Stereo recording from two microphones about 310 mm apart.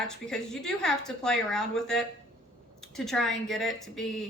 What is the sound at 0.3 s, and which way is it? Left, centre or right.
A woman's voice, centre.